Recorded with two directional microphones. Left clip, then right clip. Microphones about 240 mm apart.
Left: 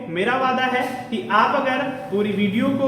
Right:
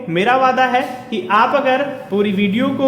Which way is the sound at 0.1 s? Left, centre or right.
Right.